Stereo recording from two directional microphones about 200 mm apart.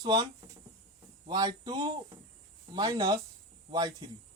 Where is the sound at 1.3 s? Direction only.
20° right (ahead or behind).